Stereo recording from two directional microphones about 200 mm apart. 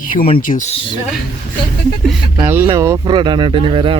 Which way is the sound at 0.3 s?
40° left (ahead or behind).